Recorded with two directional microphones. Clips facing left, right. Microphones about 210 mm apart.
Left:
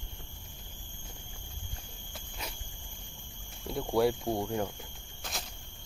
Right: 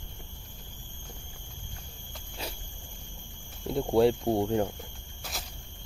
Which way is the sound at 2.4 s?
30° right (ahead or behind).